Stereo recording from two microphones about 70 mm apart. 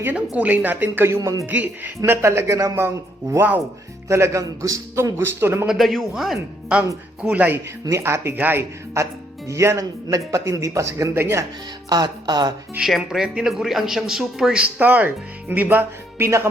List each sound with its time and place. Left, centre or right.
0.3 s speech: right
1.0 s speech: right
1.5 s speech: right
2.0 s a man's voice: right
5.6 s speech: centre
6.7 s speech: centre
7.9 s a man's voice: right
8.4 s speech: right
9.0 s music: right
9.5 s speech: right
11.9 s music: right
12.8 s speech: centre
14.6 s speech: right